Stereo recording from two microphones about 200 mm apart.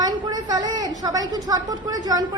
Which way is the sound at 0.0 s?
20° right (ahead or behind).